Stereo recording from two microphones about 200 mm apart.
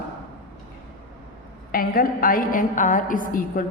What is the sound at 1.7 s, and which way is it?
A woman's voice, 45° left (ahead or behind).